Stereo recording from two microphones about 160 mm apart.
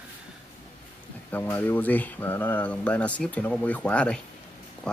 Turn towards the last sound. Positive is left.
turn(degrees=5)  # may be behind; listen again after turning